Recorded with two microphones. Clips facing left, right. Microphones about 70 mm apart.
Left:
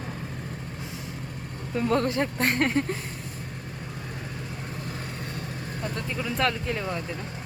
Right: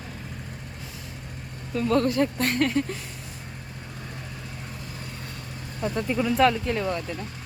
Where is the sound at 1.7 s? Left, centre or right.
Left.